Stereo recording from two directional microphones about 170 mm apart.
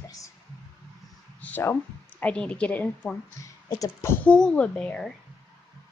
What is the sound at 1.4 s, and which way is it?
Speech, 10° left (ahead or behind).